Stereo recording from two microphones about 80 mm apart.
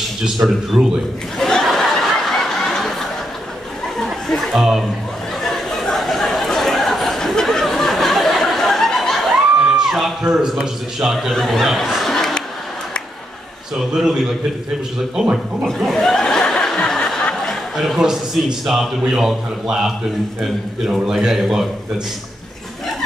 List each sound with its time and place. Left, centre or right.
0.4 s speech: right
1.4 s a sound: centre
4.0 s speech: centre
5.4 s a sound: centre
9.8 s a man's voice: centre
13.7 s a man's voice: centre
15.3 s chuckle: centre
17.7 s a man's voice: centre